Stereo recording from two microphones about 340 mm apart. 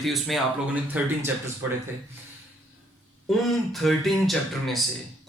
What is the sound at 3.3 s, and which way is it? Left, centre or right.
A man's voice, centre.